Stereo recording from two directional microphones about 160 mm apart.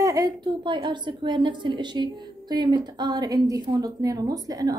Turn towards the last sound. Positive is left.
turn(degrees=-20)  # may be behind; listen again after turning